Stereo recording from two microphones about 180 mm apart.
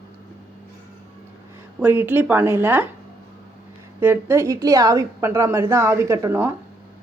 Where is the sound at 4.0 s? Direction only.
10° right (ahead or behind).